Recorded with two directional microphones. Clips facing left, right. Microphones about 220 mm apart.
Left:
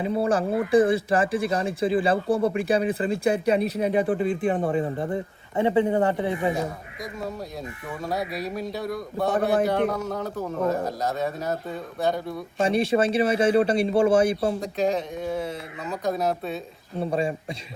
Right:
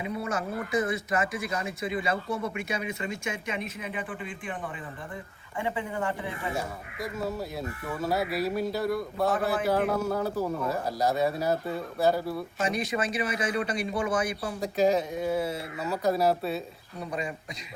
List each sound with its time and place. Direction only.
0.0 s speech: 30° left (ahead or behind)
6.6 s a man's voice: 5° right (ahead or behind)
12.5 s a man's voice: 30° left (ahead or behind)
14.6 s speech: 5° right (ahead or behind)
17.0 s a man's voice: 30° left (ahead or behind)